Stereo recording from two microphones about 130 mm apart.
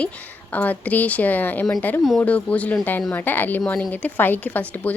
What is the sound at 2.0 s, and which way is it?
Speech, centre (ahead or behind).